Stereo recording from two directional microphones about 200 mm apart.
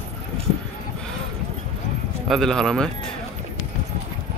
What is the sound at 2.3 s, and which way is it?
Speech, centre (ahead or behind).